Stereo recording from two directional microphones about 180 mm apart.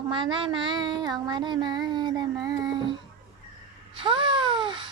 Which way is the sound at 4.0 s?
30° right (ahead or behind).